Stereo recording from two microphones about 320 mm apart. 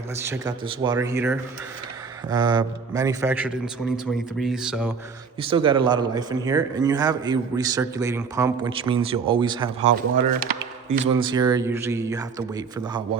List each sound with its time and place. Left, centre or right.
0.2 s a man's voice: centre
5.4 s a man's voice: centre
10.4 s speech: right
11.2 s a man's voice: centre